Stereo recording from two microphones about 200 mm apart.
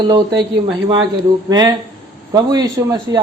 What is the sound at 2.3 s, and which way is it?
Speech, 20° right (ahead or behind).